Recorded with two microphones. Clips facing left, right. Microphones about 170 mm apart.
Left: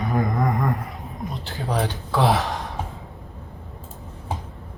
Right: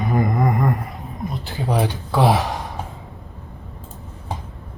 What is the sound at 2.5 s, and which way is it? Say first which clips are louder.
Gasp: right 1 dB; centre (ahead or behind).